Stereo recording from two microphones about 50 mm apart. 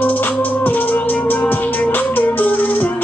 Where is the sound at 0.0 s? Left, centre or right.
Left.